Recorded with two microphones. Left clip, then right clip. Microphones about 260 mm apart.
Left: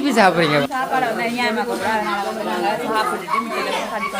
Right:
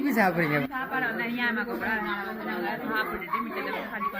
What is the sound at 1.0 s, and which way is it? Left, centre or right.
Speech, centre.